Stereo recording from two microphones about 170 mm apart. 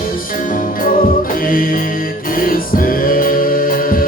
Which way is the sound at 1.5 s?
55° left (ahead or behind).